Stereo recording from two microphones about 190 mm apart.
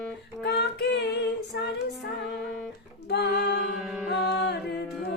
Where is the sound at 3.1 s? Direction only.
65° left (ahead or behind).